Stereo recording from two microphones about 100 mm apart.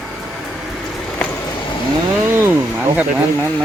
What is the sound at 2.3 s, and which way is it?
Speech, 20° right (ahead or behind).